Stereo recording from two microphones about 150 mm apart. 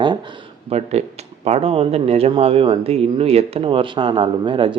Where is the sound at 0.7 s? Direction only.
45° right (ahead or behind).